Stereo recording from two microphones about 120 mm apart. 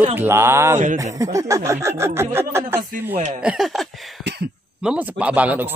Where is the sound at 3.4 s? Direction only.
5° right (ahead or behind).